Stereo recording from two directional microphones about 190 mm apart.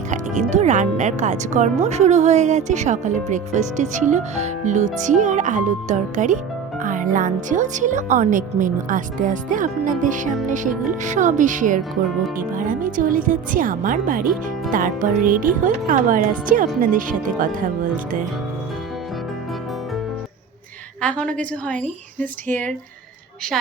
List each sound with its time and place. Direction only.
0.1 s speech: 40° right (ahead or behind)
21.0 s a woman's voice: 5° left (ahead or behind)